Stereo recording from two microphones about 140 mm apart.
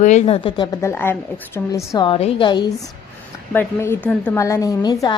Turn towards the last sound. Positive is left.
turn(degrees=30)  # may be behind; listen again after turning